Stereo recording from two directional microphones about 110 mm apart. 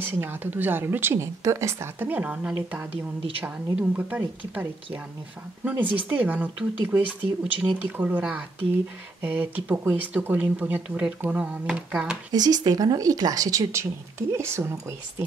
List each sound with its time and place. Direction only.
0.0 s speech: 20° right (ahead or behind)
12.3 s speech: 35° right (ahead or behind)